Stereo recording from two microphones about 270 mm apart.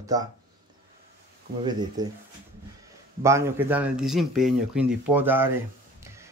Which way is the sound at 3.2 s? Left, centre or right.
Centre.